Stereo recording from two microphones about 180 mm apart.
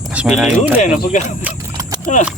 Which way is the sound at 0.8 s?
40° left (ahead or behind).